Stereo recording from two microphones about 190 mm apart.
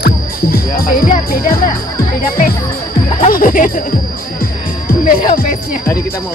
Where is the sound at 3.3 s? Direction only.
45° left (ahead or behind).